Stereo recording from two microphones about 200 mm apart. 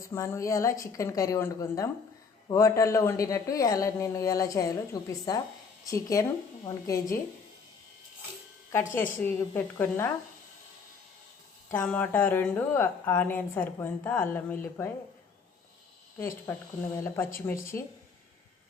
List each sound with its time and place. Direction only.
0.0 s a woman's voice: 15° left (ahead or behind)
8.7 s a woman's voice: 15° left (ahead or behind)
11.7 s a woman's voice: 10° left (ahead or behind)
16.1 s a woman's voice: 10° left (ahead or behind)